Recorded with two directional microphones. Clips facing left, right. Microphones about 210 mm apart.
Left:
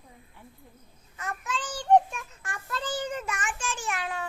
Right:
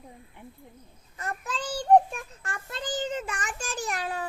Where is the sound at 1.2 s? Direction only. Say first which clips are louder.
Right 1 dB; 35° right (ahead or behind).